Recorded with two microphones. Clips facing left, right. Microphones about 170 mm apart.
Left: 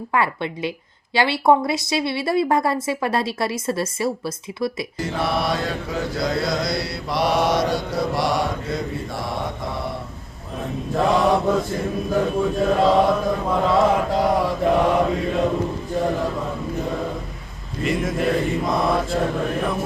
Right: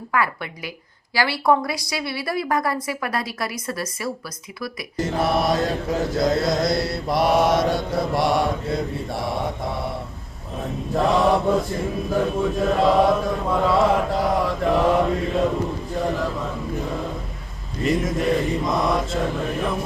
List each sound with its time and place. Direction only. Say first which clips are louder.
0.1 s a woman's voice: left 2 dB; 25° left (ahead or behind)
4.9 s mantra: right 4 dB; centre (ahead or behind)
10.9 s mantra: even; centre (ahead or behind)
17.8 s mantra: right 1 dB; centre (ahead or behind)